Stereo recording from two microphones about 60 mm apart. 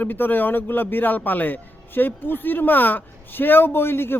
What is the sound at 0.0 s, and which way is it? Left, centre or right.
A man's voice, left.